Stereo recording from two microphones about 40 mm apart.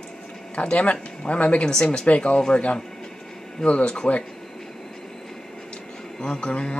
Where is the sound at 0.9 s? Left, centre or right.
Left.